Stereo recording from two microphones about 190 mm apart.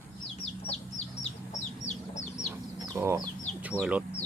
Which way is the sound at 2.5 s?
20° right (ahead or behind).